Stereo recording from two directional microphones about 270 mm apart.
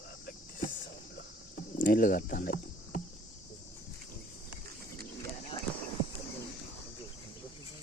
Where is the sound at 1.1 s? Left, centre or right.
Left.